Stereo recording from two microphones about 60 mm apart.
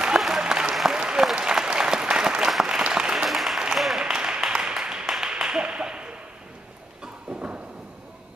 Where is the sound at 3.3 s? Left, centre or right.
Centre; by 7.8 s right.